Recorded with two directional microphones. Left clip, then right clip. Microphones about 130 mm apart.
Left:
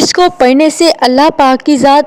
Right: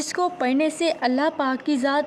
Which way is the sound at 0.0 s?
65° left (ahead or behind).